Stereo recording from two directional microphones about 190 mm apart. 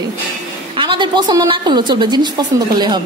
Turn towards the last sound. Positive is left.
turn(degrees=-20)  # may be behind; listen again after turning